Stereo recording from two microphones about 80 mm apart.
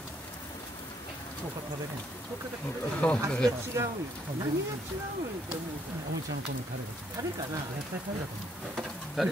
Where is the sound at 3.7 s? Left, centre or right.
Right.